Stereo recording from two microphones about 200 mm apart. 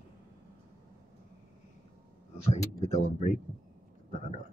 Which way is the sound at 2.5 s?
35° left (ahead or behind).